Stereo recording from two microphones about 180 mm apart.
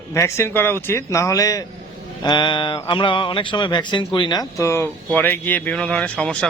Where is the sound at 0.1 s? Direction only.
15° left (ahead or behind).